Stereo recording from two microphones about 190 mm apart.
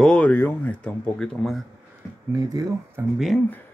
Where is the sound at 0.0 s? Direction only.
5° left (ahead or behind).